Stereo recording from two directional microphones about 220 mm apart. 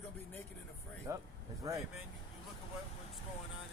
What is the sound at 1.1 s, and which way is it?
Speech, 15° right (ahead or behind).